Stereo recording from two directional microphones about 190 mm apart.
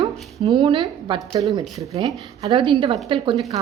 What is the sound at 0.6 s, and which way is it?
Speech, 25° right (ahead or behind).